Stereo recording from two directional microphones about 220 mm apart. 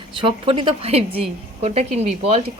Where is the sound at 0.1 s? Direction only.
25° right (ahead or behind).